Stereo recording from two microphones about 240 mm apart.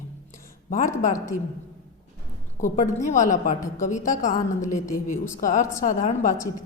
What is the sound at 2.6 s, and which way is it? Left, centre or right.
A man's voice, left.